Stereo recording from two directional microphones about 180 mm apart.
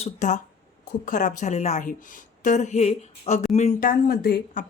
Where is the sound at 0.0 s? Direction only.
40° left (ahead or behind).